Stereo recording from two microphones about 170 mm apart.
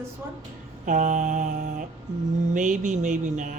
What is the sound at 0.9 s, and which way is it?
Speech, 50° right (ahead or behind).